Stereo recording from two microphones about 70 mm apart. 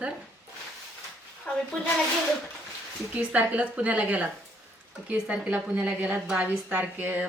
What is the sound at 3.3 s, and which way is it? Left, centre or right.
A woman's voice, centre.